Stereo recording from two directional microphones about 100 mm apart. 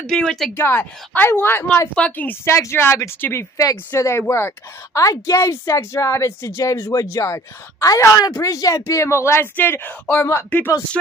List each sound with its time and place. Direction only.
0.0 s speech: 5° left (ahead or behind)
0.6 s a woman's voice: 20° left (ahead or behind)